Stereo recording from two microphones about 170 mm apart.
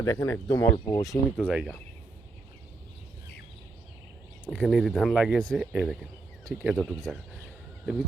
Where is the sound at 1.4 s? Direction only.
5° right (ahead or behind).